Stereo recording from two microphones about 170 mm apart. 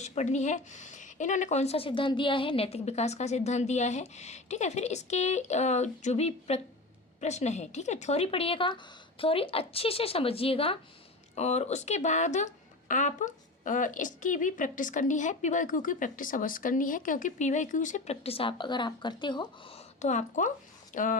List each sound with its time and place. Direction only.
0.0 s a woman's voice: 40° left (ahead or behind)
20.0 s a woman's voice: 45° left (ahead or behind)